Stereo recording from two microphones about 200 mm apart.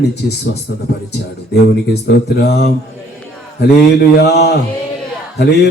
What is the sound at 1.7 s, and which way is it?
Speech, 55° left (ahead or behind).